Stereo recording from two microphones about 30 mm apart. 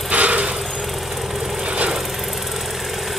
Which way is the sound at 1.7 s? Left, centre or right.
Right.